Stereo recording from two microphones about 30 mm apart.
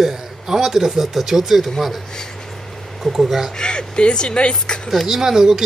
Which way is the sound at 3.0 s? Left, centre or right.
Centre.